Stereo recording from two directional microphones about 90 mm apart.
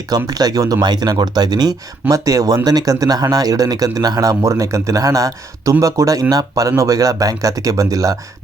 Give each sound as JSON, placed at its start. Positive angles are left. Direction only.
{"t": 0.3, "sound": "speech", "side_deg": -45}